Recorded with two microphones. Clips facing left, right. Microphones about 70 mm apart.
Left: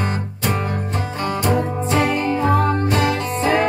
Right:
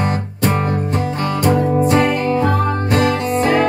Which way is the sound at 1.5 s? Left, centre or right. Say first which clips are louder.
Right 5 dB; centre.